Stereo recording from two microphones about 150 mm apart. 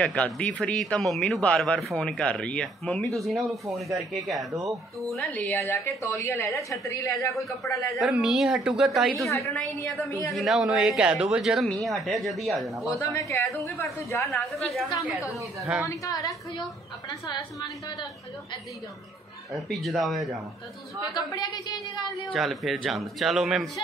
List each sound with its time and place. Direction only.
0.0 s a man's voice: 5° left (ahead or behind)
7.9 s a man's voice: centre (ahead or behind)
10.0 s a woman's voice: 20° left (ahead or behind)
10.3 s a man's voice: centre (ahead or behind)
12.8 s a woman's voice: 20° left (ahead or behind)
15.9 s a woman's voice: 20° left (ahead or behind)
19.5 s a man's voice: centre (ahead or behind)
21.1 s a woman's voice: 25° left (ahead or behind)
22.3 s a man's voice: centre (ahead or behind)